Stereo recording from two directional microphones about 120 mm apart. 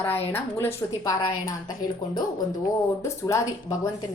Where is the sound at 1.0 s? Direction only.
30° left (ahead or behind).